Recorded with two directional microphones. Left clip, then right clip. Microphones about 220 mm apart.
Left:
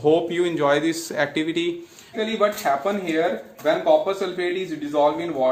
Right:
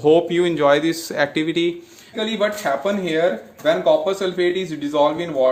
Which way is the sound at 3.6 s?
45° right (ahead or behind).